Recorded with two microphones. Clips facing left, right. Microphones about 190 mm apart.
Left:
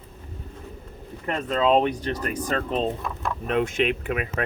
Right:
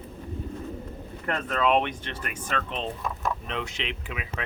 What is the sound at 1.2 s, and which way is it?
Speech, 20° left (ahead or behind).